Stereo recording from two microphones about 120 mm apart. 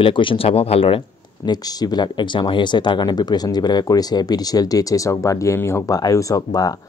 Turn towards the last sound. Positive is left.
turn(degrees=30)  # may be behind; listen again after turning